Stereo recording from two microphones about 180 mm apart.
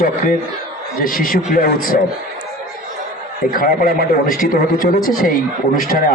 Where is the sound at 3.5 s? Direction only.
55° left (ahead or behind).